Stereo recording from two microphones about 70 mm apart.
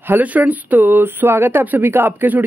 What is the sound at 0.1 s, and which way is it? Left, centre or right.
Speech, right.